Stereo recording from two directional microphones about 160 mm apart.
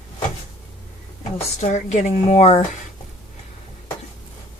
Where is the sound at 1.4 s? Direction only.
45° left (ahead or behind).